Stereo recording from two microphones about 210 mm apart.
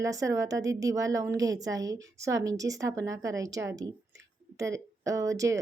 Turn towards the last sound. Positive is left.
turn(degrees=-15)  # may be behind; listen again after turning